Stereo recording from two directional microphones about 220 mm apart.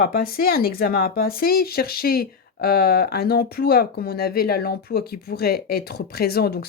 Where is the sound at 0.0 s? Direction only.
40° left (ahead or behind).